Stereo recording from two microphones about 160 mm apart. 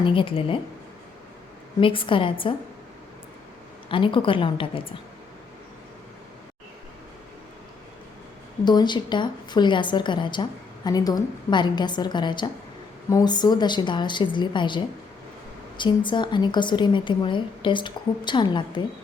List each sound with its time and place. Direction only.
0.0 s a woman's voice: 35° left (ahead or behind)
1.8 s a woman's voice: 35° left (ahead or behind)
3.8 s a woman's voice: 30° left (ahead or behind)
8.6 s a woman's voice: 25° left (ahead or behind)